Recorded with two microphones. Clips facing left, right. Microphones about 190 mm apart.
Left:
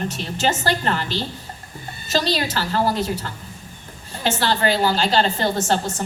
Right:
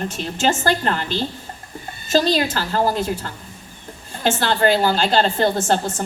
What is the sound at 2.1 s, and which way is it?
Speech, 45° right (ahead or behind).